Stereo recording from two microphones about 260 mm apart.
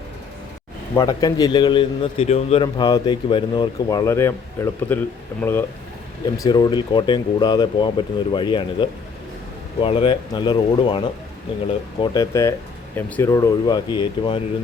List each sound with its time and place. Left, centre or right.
0.9 s a man's voice: centre